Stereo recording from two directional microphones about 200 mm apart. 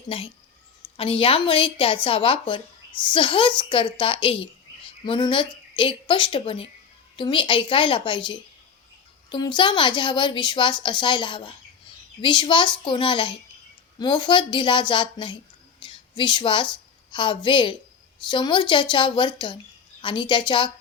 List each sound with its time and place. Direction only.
0.1 s a woman's voice: 25° left (ahead or behind)
15.8 s a sound: 25° left (ahead or behind)
16.7 s a woman's voice: 25° left (ahead or behind)